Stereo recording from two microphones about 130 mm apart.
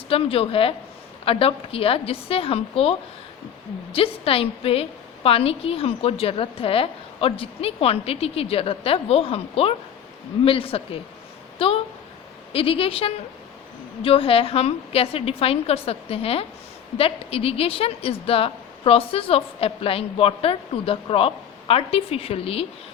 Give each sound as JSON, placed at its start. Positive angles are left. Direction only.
{"t": 0.1, "sound": "a woman's voice", "side_deg": 45}